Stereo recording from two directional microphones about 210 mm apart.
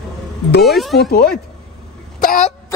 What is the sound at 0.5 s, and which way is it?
Speech, 50° left (ahead or behind).